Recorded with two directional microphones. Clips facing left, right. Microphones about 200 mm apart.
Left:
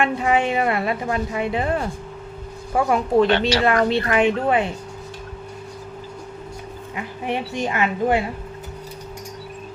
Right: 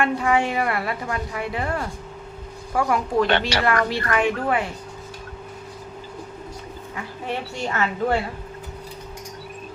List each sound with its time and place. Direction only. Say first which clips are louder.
0.0 s a woman's voice: left 1 dB; 20° left (ahead or behind)
6.9 s a woman's voice: left 4 dB; 15° left (ahead or behind)